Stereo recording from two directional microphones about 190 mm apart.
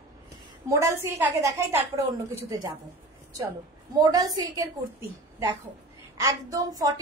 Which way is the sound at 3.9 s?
20° right (ahead or behind).